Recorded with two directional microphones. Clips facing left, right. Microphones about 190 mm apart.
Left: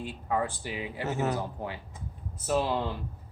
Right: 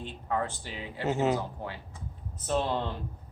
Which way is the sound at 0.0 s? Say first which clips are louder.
Left 2 dB; 10° left (ahead or behind).